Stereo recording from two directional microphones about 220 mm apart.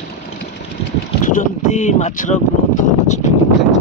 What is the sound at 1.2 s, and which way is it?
Speech, 35° left (ahead or behind).